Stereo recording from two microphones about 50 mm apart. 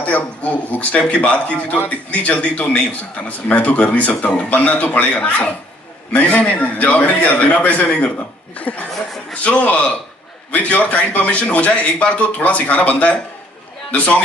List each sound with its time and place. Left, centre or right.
0.0 s a man's voice: left